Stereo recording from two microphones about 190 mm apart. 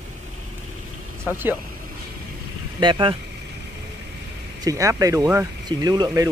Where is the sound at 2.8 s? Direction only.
25° right (ahead or behind).